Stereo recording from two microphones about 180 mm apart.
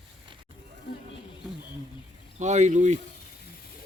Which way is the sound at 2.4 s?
40° right (ahead or behind).